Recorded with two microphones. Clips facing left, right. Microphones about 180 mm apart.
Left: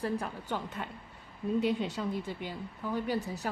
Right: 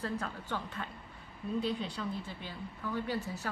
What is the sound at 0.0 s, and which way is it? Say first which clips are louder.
A woman's voice: left 3 dB; 15° left (ahead or behind).